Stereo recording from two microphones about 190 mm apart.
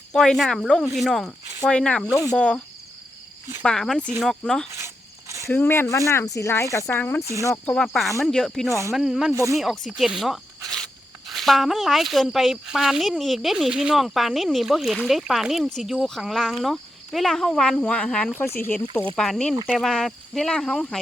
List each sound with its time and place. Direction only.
0.1 s speech: 5° left (ahead or behind)
3.6 s speech: 5° left (ahead or behind)
9.3 s speech: 15° right (ahead or behind)
9.6 s speech: centre (ahead or behind)
10.2 s snake: centre (ahead or behind)
11.3 s speech: centre (ahead or behind)